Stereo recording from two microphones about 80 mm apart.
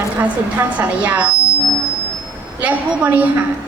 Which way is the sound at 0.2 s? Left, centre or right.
Centre.